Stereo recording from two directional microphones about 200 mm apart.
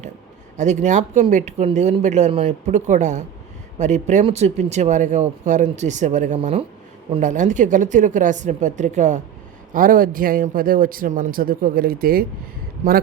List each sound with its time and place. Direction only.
0.5 s speech: 35° right (ahead or behind)